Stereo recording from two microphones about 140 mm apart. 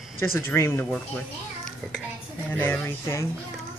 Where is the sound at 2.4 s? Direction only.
10° left (ahead or behind).